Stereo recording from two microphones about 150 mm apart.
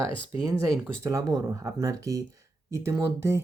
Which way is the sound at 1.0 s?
25° right (ahead or behind).